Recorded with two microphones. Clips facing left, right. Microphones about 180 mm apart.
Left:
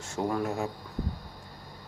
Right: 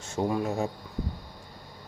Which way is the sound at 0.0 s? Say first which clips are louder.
Right 2 dB; 20° right (ahead or behind).